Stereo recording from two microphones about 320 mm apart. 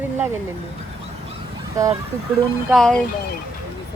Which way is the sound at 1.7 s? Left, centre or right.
Centre.